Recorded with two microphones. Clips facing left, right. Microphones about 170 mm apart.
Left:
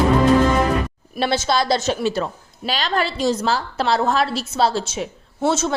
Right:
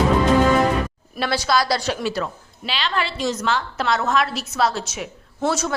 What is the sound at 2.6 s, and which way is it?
A woman's voice, 40° left (ahead or behind).